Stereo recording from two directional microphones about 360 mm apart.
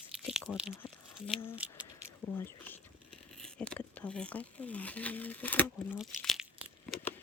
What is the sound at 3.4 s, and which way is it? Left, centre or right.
Speech, centre.